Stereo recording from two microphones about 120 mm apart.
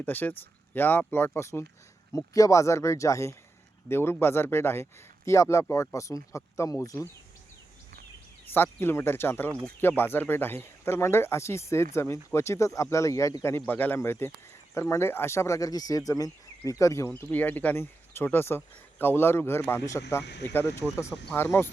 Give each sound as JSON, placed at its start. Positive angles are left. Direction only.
{"t": 0.0, "sound": "speech", "side_deg": 15}
{"t": 8.5, "sound": "speech", "side_deg": 20}
{"t": 17.1, "sound": "speech", "side_deg": 15}